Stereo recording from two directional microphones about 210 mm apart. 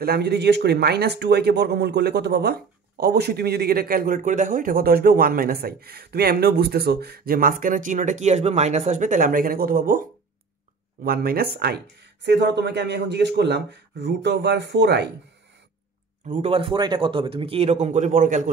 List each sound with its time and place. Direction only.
0.0 s speech: 50° right (ahead or behind)
11.1 s speech: 45° right (ahead or behind)
16.3 s speech: 30° right (ahead or behind)